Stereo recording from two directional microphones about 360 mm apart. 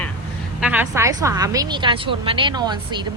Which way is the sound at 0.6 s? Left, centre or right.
Centre.